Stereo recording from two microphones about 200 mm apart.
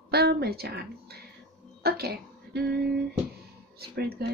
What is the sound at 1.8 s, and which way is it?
Speech, 50° right (ahead or behind).